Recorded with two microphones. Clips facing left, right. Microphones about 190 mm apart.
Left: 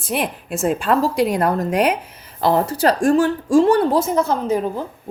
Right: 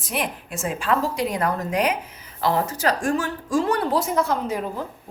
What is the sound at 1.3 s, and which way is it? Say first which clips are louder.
Speech: left 5 dB; 60° left (ahead or behind).